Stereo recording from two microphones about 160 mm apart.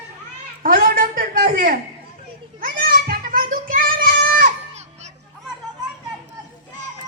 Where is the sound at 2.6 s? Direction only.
60° right (ahead or behind).